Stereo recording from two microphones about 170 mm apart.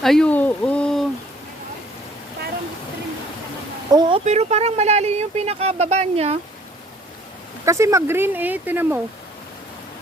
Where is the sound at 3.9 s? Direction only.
25° right (ahead or behind).